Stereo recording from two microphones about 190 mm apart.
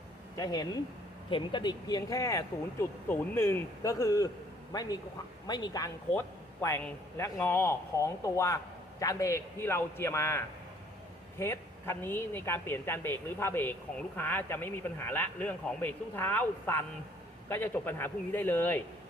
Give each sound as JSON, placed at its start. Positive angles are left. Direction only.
{"t": 0.3, "sound": "a man's voice", "side_deg": 20}